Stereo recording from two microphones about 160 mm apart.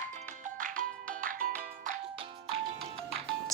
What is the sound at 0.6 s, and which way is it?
Music, 60° right (ahead or behind).